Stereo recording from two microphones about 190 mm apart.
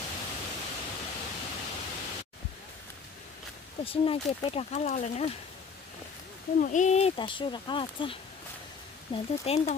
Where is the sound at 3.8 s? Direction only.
30° left (ahead or behind).